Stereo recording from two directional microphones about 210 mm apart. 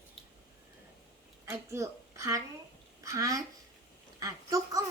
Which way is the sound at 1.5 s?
15° right (ahead or behind).